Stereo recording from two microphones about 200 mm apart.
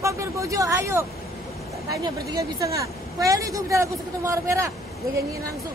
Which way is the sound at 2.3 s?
15° right (ahead or behind).